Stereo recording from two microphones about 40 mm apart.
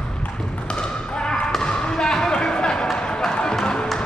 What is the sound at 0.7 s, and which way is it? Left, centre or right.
Basketball bounce, left.